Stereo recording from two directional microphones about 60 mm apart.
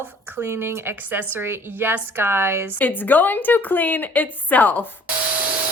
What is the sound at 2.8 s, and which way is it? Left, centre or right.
A woman's voice, left.